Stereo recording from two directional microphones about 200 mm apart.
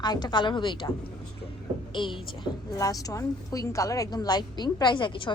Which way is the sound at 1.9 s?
25° left (ahead or behind).